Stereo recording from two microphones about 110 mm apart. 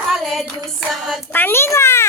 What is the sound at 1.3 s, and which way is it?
Babbling, 20° left (ahead or behind).